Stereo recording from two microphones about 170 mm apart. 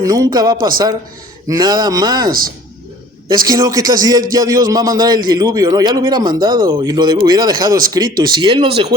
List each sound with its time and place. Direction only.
0.0 s a man's voice: 20° right (ahead or behind)